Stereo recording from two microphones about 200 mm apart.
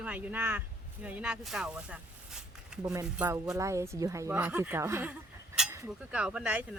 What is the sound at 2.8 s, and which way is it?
Speech, 15° right (ahead or behind).